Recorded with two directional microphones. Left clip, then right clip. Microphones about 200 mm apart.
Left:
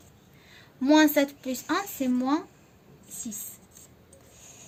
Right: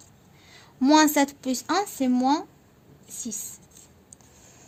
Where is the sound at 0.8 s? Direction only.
55° right (ahead or behind).